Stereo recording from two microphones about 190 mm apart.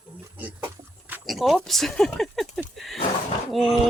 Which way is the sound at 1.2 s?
Centre (ahead or behind).